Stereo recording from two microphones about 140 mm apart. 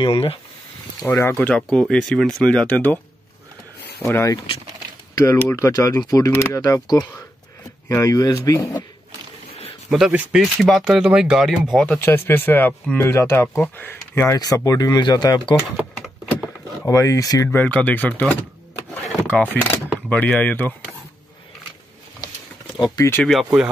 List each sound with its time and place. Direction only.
0.0 s speech: 40° left (ahead or behind)
1.0 s speech: 20° left (ahead or behind)
1.5 s speech: 5° left (ahead or behind)
4.0 s speech: 20° left (ahead or behind)
9.8 s speech: centre (ahead or behind)
11.7 s speech: 10° left (ahead or behind); by 15.5 s 30° left (ahead or behind)
16.8 s speech: 20° left (ahead or behind)
17.5 s speech: 10° left (ahead or behind)
22.9 s speech: 20° left (ahead or behind)
23.2 s speech: centre (ahead or behind)